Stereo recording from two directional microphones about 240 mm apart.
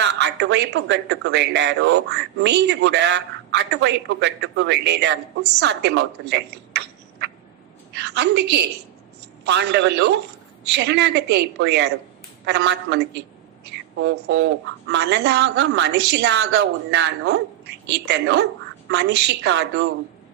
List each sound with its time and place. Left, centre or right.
0.0 s speech: right
14.0 s a woman's voice: right